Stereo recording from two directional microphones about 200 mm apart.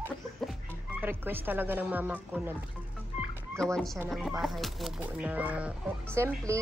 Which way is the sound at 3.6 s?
Centre (ahead or behind).